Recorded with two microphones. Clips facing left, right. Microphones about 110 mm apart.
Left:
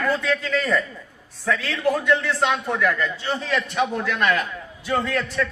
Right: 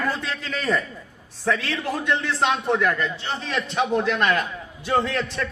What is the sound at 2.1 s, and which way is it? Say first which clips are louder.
A man's voice: left 2 dB; 25° right (ahead or behind).